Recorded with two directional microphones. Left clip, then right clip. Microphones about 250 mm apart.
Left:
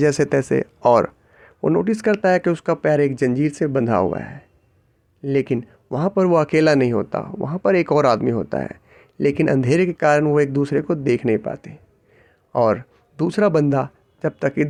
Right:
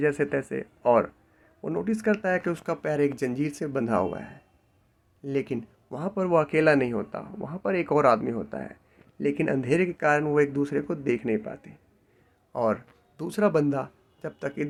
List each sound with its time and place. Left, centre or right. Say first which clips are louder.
0.0 s speech: left 8 dB; left